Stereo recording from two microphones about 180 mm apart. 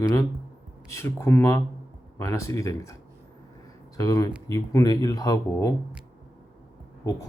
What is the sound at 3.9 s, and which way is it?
Speech, 20° left (ahead or behind).